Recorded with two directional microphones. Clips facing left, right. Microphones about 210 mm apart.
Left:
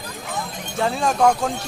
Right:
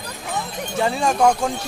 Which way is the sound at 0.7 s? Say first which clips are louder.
Right 1 dB; centre (ahead or behind).